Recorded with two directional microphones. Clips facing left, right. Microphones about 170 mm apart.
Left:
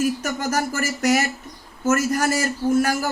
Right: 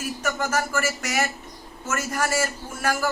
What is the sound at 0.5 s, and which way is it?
A man's voice, 40° left (ahead or behind).